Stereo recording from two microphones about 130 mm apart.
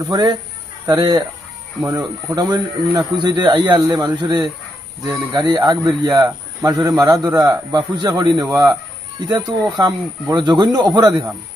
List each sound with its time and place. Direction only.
0.1 s speech: 30° right (ahead or behind)